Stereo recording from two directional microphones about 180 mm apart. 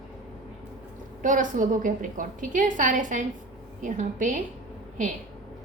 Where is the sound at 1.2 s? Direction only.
45° right (ahead or behind).